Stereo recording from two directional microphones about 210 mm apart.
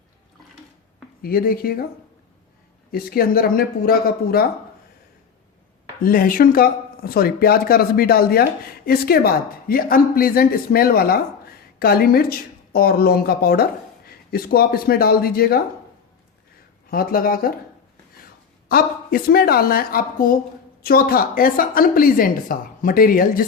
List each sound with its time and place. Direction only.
1.2 s speech: 45° left (ahead or behind)
2.9 s speech: 45° left (ahead or behind)
6.0 s speech: 45° left (ahead or behind)
16.9 s speech: 45° left (ahead or behind)
18.7 s speech: 45° left (ahead or behind)